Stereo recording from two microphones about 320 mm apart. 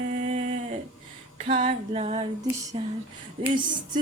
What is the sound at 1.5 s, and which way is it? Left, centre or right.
Female singing, right.